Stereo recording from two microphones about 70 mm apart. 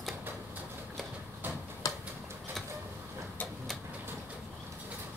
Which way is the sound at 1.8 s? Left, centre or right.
Left.